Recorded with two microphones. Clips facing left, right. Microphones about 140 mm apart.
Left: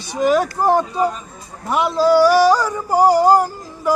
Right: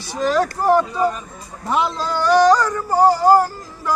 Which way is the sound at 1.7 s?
5° left (ahead or behind).